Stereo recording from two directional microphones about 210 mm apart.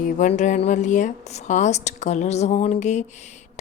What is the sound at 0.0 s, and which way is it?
Speech, 35° left (ahead or behind).